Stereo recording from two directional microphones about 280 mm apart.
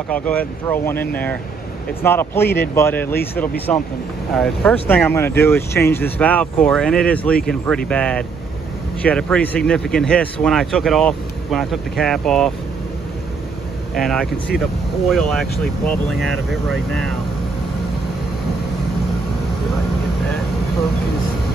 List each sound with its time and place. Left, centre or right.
0.1 s speech: centre
2.4 s speech: left
2.7 s speech: centre
13.9 s speech: centre